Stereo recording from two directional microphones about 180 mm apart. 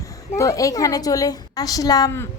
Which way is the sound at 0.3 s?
20° left (ahead or behind).